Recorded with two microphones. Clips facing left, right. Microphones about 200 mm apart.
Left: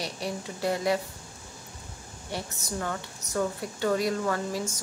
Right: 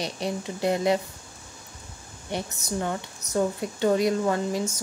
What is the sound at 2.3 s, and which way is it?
A woman's voice, 20° right (ahead or behind).